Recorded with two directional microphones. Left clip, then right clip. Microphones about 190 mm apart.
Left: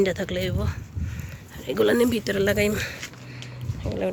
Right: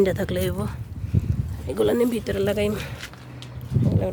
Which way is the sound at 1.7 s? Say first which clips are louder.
Left 1 dB; 10° right (ahead or behind).